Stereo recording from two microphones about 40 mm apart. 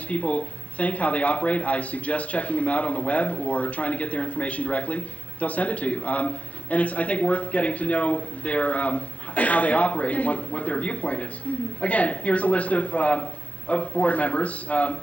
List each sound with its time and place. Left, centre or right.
0.1 s speech: left